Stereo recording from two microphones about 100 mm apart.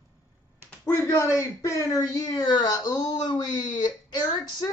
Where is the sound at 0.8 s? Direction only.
30° left (ahead or behind).